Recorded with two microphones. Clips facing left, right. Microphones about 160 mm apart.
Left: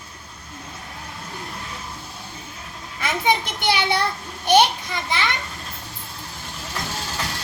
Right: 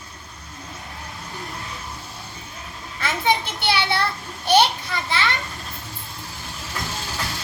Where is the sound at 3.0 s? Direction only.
15° left (ahead or behind).